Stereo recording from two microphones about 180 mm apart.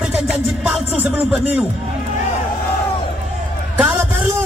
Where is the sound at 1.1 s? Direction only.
10° right (ahead or behind).